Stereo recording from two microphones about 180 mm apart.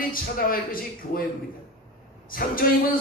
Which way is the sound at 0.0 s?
50° left (ahead or behind).